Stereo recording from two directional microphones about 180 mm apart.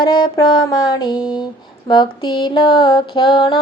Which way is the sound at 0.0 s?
25° left (ahead or behind).